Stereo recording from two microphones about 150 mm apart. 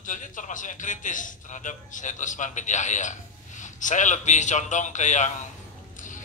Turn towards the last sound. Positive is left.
turn(degrees=60)  # may be behind; listen again after turning